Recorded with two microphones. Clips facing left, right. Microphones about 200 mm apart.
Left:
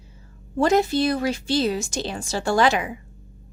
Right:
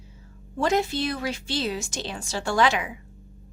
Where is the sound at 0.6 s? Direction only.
40° left (ahead or behind).